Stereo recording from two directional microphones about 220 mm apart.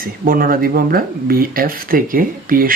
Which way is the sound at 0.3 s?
40° right (ahead or behind).